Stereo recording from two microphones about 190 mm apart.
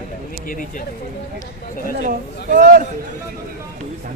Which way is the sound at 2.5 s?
45° right (ahead or behind).